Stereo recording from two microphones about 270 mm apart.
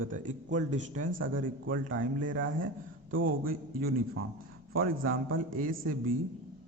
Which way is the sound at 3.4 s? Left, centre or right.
Right.